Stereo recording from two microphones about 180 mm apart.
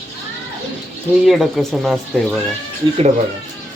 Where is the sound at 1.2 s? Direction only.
Centre (ahead or behind).